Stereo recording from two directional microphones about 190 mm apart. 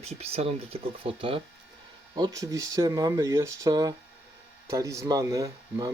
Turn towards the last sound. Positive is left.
turn(degrees=-20)  # may be behind; listen again after turning